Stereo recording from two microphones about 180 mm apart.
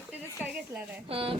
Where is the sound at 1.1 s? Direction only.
30° right (ahead or behind).